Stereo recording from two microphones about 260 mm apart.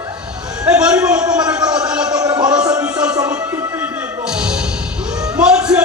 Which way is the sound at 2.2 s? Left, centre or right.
Centre.